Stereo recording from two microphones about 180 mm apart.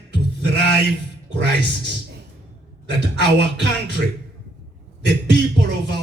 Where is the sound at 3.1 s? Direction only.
70° right (ahead or behind).